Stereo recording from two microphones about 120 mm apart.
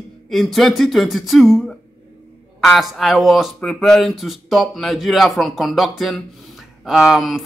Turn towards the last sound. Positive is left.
turn(degrees=0)  # may be behind; listen again after turning